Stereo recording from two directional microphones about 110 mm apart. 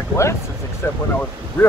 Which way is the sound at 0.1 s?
25° left (ahead or behind).